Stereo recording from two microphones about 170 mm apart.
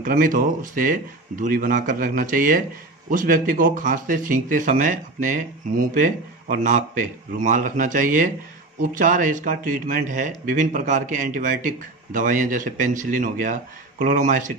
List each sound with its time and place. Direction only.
0.0 s speech: 55° right (ahead or behind)